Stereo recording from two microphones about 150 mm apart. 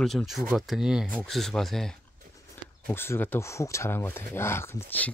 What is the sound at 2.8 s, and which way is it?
Speech, 15° left (ahead or behind).